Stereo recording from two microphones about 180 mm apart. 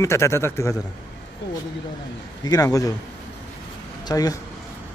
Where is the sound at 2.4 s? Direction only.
20° left (ahead or behind).